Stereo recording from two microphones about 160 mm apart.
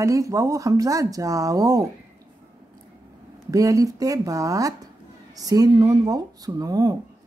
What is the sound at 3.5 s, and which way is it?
Speech, 20° right (ahead or behind).